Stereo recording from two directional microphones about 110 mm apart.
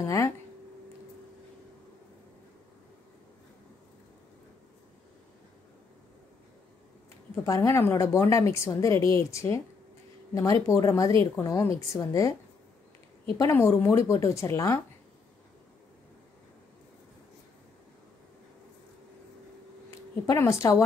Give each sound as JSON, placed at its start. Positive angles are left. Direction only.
{"t": 0.0, "sound": "a woman's voice", "side_deg": 30}
{"t": 7.4, "sound": "a woman's voice", "side_deg": 30}
{"t": 13.4, "sound": "a woman's voice", "side_deg": 25}
{"t": 20.2, "sound": "a woman's voice", "side_deg": 25}